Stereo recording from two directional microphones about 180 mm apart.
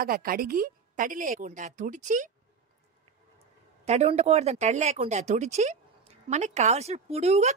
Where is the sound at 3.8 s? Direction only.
35° right (ahead or behind).